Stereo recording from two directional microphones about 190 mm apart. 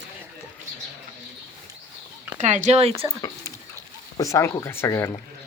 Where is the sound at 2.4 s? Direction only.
35° right (ahead or behind).